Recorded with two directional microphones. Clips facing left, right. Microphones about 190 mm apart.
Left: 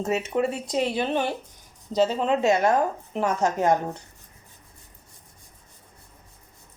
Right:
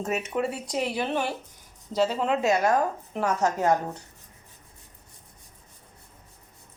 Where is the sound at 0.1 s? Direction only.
25° left (ahead or behind).